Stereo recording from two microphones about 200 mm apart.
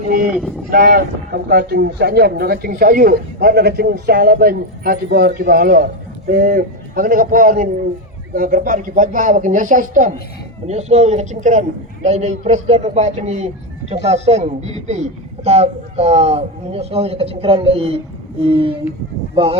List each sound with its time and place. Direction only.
0.7 s speech: 45° right (ahead or behind); by 18.8 s 25° right (ahead or behind)